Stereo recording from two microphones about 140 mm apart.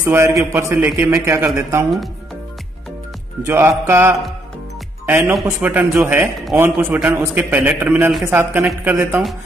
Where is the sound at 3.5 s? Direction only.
20° right (ahead or behind).